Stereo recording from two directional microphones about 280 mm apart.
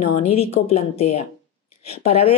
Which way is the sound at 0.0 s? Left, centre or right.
Left.